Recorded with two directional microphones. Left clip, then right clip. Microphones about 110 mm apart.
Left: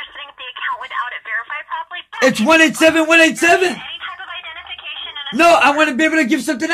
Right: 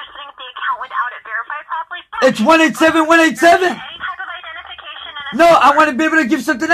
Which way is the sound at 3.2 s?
40° right (ahead or behind).